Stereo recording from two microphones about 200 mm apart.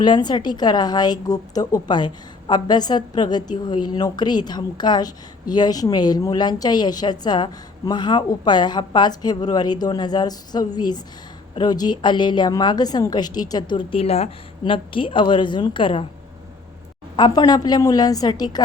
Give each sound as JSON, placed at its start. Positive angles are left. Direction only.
{"t": 0.0, "sound": "a woman's voice", "side_deg": 20}
{"t": 17.2, "sound": "a woman's voice", "side_deg": 20}